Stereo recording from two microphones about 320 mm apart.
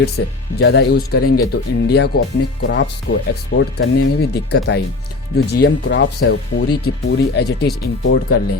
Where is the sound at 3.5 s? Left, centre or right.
Left.